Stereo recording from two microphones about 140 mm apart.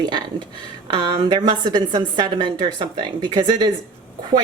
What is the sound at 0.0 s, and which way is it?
A woman's voice, 35° right (ahead or behind).